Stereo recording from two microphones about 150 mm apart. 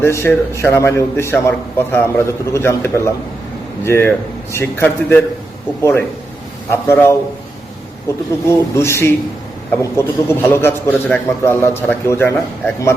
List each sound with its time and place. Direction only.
0.0 s a man's voice: 15° left (ahead or behind)
8.4 s a man's voice: 20° left (ahead or behind)